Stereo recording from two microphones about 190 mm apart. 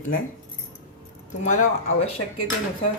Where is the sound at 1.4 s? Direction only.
40° left (ahead or behind).